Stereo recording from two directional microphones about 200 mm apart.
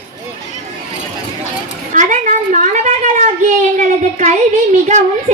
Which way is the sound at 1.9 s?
40° right (ahead or behind).